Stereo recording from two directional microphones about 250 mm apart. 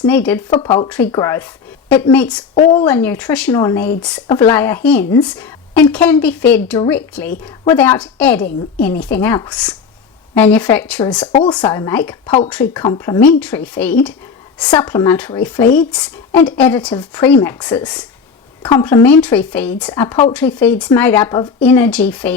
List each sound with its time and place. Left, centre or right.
0.0 s speech: centre
0.6 s speech: centre
0.9 s speech: centre
2.6 s speech: left
2.8 s speech: centre
11.3 s speech: centre
12.2 s speech: left
12.5 s speech: centre
12.8 s speech: centre
13.4 s speech: centre